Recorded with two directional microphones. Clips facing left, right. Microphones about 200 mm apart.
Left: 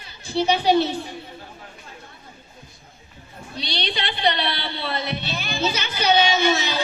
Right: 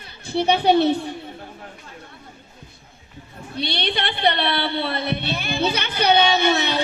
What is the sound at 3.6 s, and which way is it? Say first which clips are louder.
A woman's voice: right 3 dB; 55° right (ahead or behind).